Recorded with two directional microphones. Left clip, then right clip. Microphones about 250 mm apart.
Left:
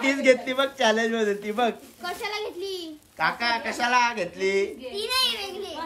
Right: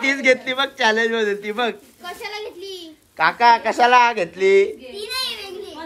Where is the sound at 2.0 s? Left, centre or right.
Left.